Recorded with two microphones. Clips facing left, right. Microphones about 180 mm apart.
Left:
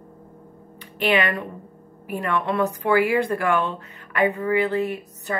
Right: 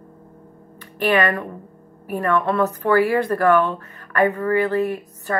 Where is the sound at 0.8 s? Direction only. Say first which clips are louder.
Right 3 dB; 20° left (ahead or behind).